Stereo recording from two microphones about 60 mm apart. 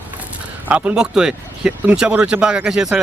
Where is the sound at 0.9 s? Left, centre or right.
Centre.